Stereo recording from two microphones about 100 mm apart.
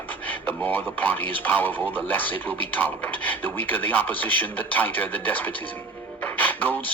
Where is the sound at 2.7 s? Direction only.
15° left (ahead or behind).